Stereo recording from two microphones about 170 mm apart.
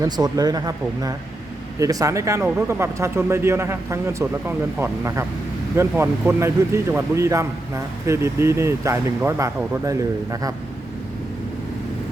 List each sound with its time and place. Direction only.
0.0 s a man's voice: 20° right (ahead or behind)